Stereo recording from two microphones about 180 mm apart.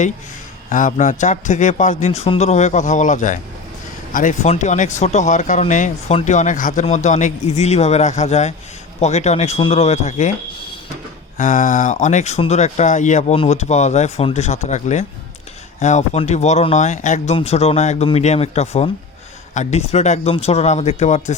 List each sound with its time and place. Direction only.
0.7 s a man's voice: 45° left (ahead or behind)
11.3 s speech: 45° left (ahead or behind)